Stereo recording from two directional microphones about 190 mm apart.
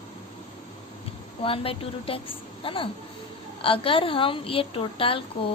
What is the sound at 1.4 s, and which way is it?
A woman's voice, 30° left (ahead or behind).